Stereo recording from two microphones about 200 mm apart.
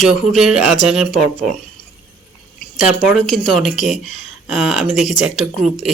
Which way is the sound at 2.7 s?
Centre (ahead or behind).